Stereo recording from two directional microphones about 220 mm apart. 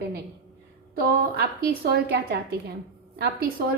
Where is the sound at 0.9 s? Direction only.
45° right (ahead or behind).